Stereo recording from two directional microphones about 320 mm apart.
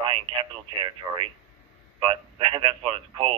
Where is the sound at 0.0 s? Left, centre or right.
Centre.